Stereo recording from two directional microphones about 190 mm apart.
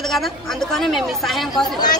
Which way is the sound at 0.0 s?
Centre (ahead or behind).